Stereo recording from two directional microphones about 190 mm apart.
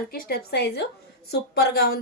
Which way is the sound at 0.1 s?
55° left (ahead or behind).